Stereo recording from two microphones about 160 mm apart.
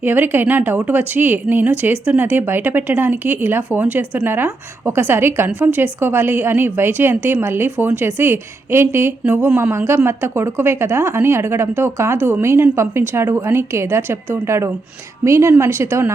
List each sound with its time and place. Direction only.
0.0 s speech: 10° right (ahead or behind)